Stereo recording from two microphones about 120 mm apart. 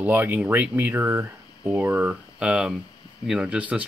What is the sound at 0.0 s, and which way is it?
Speech, 15° right (ahead or behind).